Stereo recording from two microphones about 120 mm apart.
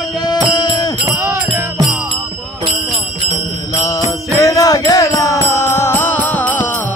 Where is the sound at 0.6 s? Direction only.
35° left (ahead or behind).